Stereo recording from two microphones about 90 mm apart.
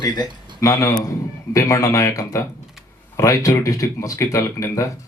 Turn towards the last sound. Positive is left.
turn(degrees=35)  # may be behind; listen again after turning